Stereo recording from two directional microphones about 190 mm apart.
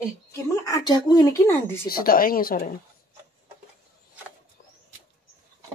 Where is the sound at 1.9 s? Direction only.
50° left (ahead or behind).